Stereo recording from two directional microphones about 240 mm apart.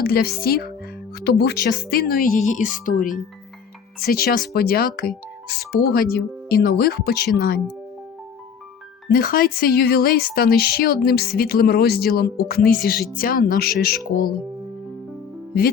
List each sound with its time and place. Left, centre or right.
0.0 s speech: left
9.0 s speech: left